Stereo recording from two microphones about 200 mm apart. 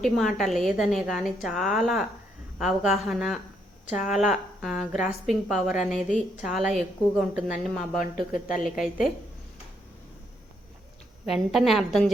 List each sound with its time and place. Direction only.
0.0 s a woman's voice: centre (ahead or behind)
7.9 s speech: 45° left (ahead or behind)
8.6 s a woman's voice: centre (ahead or behind)
11.3 s a woman's voice: centre (ahead or behind)